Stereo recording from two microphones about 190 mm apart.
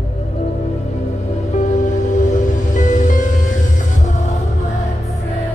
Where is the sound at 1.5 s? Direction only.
40° left (ahead or behind).